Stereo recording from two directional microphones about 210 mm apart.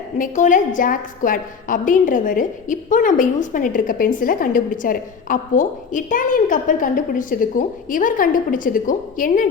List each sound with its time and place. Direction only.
0.2 s a woman's voice: 35° left (ahead or behind)